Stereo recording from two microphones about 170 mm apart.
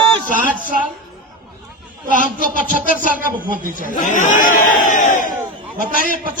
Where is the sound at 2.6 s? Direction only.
55° left (ahead or behind).